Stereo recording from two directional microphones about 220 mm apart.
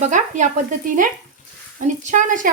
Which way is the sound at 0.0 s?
35° right (ahead or behind).